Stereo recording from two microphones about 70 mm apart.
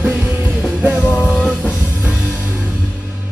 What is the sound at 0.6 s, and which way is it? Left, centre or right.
Music, centre.